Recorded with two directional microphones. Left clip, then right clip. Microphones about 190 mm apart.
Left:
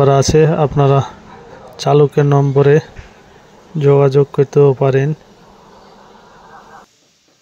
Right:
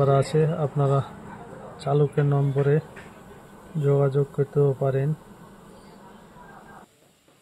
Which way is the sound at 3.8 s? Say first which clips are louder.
Left 12 dB; 50° left (ahead or behind).